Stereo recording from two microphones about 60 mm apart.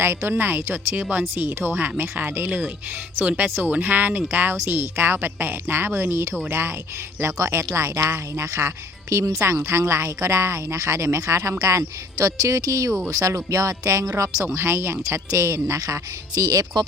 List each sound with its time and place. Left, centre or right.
0.0 s a woman's voice: right
4.5 s a woman's voice: right
7.8 s a woman's voice: right
10.1 s speech: right
14.4 s a woman's voice: right